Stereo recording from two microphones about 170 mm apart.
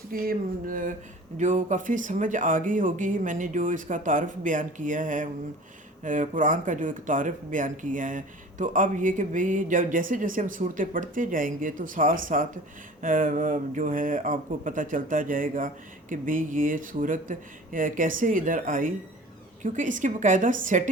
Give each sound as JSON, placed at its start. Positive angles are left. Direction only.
{"t": 0.1, "sound": "speech", "side_deg": -55}